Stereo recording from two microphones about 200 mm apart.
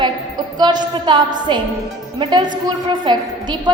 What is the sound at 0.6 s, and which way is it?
A woman's voice, 20° right (ahead or behind).